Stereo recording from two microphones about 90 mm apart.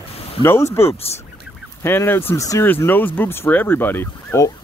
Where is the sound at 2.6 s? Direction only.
20° left (ahead or behind).